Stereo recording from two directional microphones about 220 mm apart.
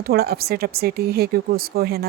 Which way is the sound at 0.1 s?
45° right (ahead or behind).